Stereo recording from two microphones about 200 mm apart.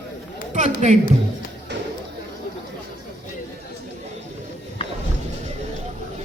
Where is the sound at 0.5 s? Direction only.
35° right (ahead or behind).